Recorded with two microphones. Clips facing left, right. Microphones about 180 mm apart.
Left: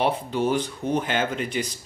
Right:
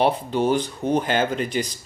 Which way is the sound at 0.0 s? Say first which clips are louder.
Right 3 dB; 30° right (ahead or behind).